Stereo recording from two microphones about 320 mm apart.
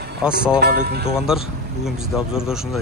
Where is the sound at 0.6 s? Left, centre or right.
Right.